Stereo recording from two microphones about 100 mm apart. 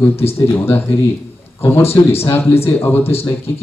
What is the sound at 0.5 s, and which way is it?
Speech, 20° left (ahead or behind).